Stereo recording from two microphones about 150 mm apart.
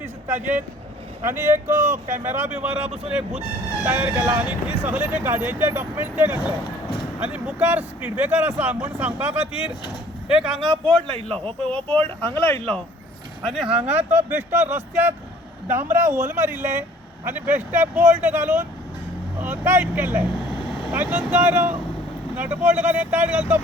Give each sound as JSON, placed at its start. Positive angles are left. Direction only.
{"t": 1.2, "sound": "speech", "side_deg": -15}
{"t": 11.0, "sound": "a man's voice", "side_deg": -40}
{"t": 12.2, "sound": "speech", "side_deg": 10}
{"t": 13.4, "sound": "speech", "side_deg": 0}